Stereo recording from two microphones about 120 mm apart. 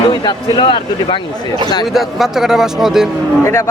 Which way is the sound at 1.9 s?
Centre (ahead or behind).